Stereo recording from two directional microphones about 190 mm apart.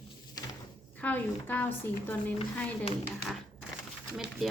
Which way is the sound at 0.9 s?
10° left (ahead or behind).